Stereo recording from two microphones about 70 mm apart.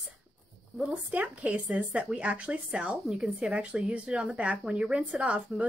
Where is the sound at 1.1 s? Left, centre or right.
Centre.